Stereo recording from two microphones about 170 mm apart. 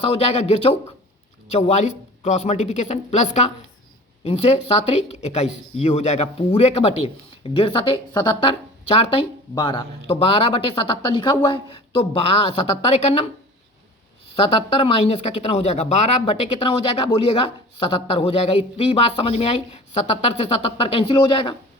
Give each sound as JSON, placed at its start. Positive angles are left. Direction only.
{"t": 0.0, "sound": "speech", "side_deg": 35}
{"t": 14.3, "sound": "speech", "side_deg": 35}